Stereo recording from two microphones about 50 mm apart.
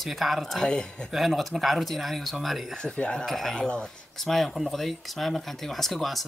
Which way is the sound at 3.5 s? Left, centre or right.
Centre.